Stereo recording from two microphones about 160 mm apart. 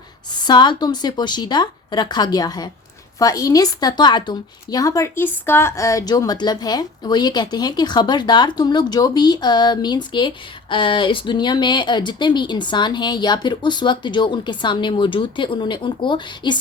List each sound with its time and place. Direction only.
0.3 s a woman's voice: 25° left (ahead or behind)